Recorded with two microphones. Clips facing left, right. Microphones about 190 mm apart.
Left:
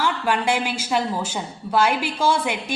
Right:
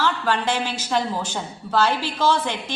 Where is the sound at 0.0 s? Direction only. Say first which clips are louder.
Even; 10° left (ahead or behind).